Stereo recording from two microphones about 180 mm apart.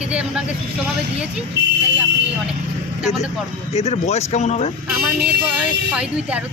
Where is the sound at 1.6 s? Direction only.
70° right (ahead or behind).